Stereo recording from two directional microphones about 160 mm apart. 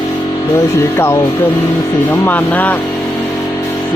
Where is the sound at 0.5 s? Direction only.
15° left (ahead or behind).